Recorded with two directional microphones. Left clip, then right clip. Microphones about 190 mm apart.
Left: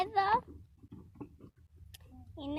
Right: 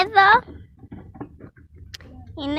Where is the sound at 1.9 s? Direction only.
5° right (ahead or behind).